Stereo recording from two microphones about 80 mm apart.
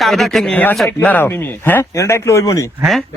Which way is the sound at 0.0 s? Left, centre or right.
Centre.